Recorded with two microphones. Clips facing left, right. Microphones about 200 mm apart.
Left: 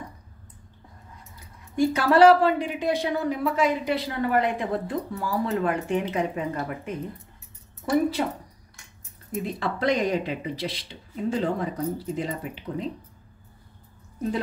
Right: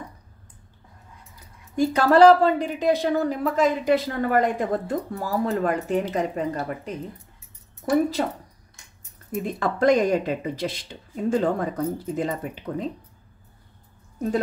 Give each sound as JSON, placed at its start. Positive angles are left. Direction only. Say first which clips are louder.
{"t": 1.8, "sound": "speech", "louder": "right 2 dB", "side_deg": -40}
{"t": 8.2, "sound": "speech", "louder": "right 1 dB", "side_deg": -45}
{"t": 9.4, "sound": "speech", "louder": "right 4 dB", "side_deg": -50}